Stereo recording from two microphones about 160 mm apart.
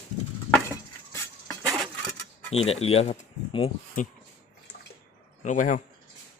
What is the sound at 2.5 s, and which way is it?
Speech, 40° left (ahead or behind).